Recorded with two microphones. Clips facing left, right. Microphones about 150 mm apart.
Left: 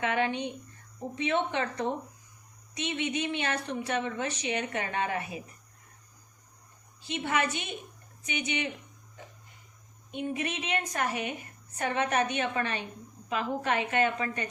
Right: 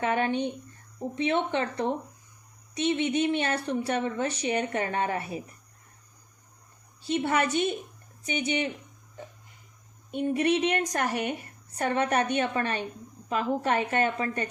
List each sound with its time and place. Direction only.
0.0 s a woman's voice: 35° right (ahead or behind)
7.1 s a woman's voice: 35° right (ahead or behind)
10.2 s a woman's voice: 35° right (ahead or behind)
11.8 s a woman's voice: 35° right (ahead or behind)